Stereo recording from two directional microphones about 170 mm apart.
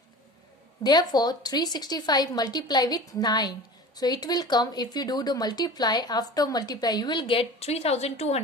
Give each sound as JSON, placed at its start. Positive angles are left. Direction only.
{"t": 0.9, "sound": "speech", "side_deg": 25}